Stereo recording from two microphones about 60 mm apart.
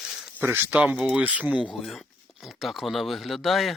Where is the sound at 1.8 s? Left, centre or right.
Centre.